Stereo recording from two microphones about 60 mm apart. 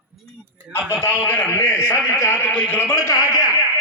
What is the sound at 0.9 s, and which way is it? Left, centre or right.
A man's voice, left.